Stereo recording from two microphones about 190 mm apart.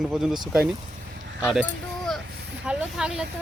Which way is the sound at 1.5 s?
Centre (ahead or behind).